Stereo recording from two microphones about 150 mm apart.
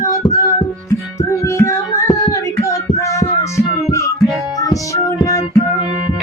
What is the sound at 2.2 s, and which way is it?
Child singing, 20° left (ahead or behind).